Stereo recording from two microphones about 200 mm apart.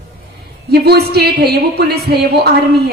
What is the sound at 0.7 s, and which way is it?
A woman's voice, 50° right (ahead or behind).